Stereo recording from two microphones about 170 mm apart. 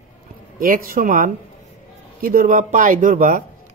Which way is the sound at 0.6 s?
55° right (ahead or behind).